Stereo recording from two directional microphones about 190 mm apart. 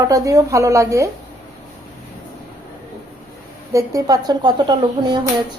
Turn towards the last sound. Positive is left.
turn(degrees=-25)  # may be behind; listen again after turning